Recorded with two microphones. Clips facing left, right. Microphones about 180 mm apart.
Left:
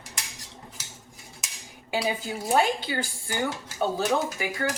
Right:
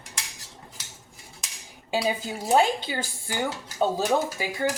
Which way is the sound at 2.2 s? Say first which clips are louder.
Right 2 dB; 20° right (ahead or behind).